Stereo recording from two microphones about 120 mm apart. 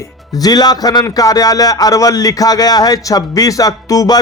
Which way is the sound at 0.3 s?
35° left (ahead or behind).